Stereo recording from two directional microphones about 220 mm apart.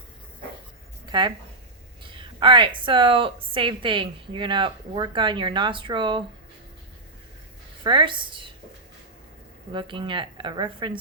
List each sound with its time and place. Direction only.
1.0 s a sound: 20° right (ahead or behind)
2.0 s a woman's voice: 20° right (ahead or behind)
7.9 s a woman's voice: 20° right (ahead or behind)
9.7 s a woman's voice: 20° right (ahead or behind)